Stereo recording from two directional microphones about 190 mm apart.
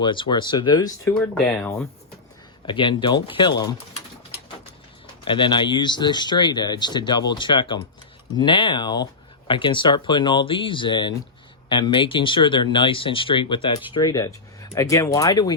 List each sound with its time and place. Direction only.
0.0 s speech: 25° left (ahead or behind)
1.1 s speech: 5° left (ahead or behind)
2.6 s speech: 25° left (ahead or behind)
5.2 s speech: 25° left (ahead or behind)